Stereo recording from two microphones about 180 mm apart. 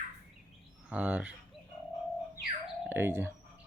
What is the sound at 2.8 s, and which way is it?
Speech, 10° right (ahead or behind).